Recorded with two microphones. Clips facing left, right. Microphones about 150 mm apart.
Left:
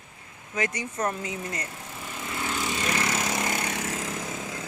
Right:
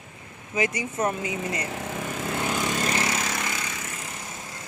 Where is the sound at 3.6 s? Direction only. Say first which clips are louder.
Left 5 dB; 65° left (ahead or behind); by 4.1 s 90° left.